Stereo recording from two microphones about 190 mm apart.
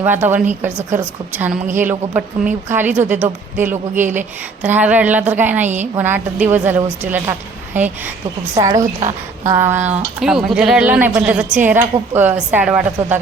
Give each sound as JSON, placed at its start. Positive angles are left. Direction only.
{"t": 0.0, "sound": "speech", "side_deg": -10}
{"t": 5.6, "sound": "a woman's voice", "side_deg": -40}
{"t": 6.0, "sound": "speech", "side_deg": -10}
{"t": 8.8, "sound": "a woman's voice", "side_deg": -40}
{"t": 9.5, "sound": "speech", "side_deg": -10}